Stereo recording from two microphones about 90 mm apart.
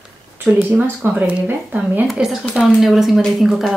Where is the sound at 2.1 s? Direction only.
Centre (ahead or behind).